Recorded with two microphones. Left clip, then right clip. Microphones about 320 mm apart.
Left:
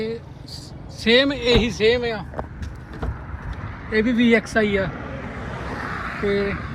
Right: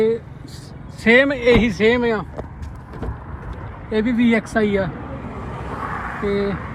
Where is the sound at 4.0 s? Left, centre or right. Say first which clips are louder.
Left 1 dB; centre.